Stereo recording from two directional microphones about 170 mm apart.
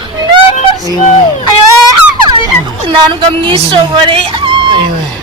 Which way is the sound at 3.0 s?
30° right (ahead or behind).